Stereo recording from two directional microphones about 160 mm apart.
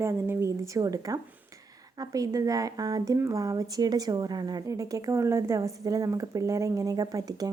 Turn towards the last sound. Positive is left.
turn(degrees=-25)  # may be behind; listen again after turning